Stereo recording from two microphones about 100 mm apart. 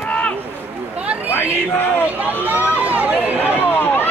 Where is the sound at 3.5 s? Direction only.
20° left (ahead or behind).